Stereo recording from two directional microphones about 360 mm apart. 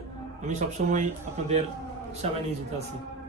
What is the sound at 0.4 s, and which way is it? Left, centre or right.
Speech, right.